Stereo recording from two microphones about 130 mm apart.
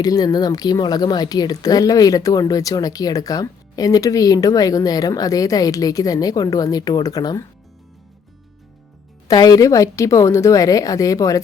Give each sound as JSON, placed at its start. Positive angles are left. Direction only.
{"t": 0.0, "sound": "speech", "side_deg": 30}
{"t": 9.2, "sound": "speech", "side_deg": 30}